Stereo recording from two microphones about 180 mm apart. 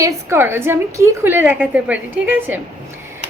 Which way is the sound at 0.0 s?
15° right (ahead or behind).